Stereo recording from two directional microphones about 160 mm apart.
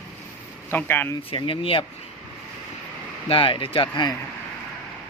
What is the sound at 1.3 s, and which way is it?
Speech, 35° left (ahead or behind).